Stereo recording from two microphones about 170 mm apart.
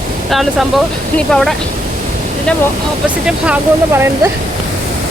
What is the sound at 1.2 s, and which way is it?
Speech, 5° left (ahead or behind).